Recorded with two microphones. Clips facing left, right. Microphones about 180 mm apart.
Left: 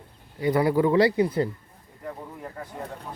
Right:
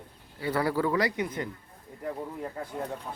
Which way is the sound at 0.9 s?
30° left (ahead or behind).